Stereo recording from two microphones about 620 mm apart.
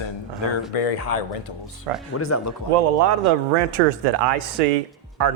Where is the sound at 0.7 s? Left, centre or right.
Left.